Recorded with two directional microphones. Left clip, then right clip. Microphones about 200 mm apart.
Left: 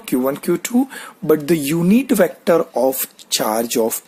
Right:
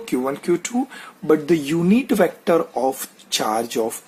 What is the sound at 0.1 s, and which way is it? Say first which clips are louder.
Speech: left 3 dB; 35° left (ahead or behind).